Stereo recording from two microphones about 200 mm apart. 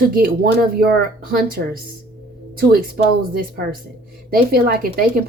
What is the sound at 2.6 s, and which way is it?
Speech, 50° right (ahead or behind).